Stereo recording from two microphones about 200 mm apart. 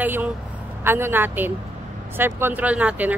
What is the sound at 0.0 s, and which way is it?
Speech, 10° right (ahead or behind).